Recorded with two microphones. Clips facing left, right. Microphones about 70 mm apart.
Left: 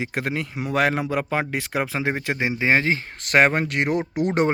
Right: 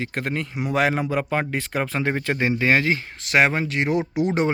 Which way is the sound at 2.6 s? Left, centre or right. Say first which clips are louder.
Left 1 dB; left.